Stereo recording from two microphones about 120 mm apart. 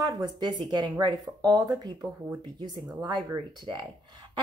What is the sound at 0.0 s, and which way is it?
A woman's voice, 35° right (ahead or behind).